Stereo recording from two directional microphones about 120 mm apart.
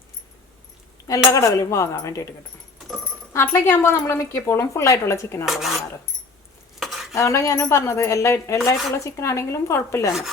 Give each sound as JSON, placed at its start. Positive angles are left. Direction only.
{"t": 1.0, "sound": "a woman's voice", "side_deg": 25}
{"t": 3.3, "sound": "a woman's voice", "side_deg": 20}
{"t": 5.5, "sound": "cutlery", "side_deg": 0}
{"t": 6.7, "sound": "stir", "side_deg": 0}
{"t": 7.1, "sound": "a woman's voice", "side_deg": 25}